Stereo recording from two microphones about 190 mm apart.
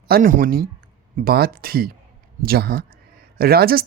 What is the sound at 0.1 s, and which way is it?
A man's voice, 45° right (ahead or behind).